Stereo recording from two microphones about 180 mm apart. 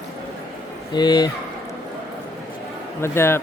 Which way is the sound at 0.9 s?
20° left (ahead or behind).